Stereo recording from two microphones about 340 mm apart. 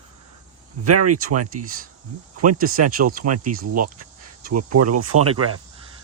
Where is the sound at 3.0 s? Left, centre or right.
Right.